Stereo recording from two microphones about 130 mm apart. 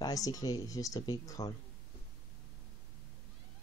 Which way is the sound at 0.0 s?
30° left (ahead or behind).